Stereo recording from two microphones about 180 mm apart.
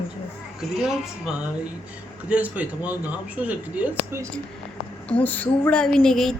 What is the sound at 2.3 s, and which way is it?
A man's voice, 10° right (ahead or behind).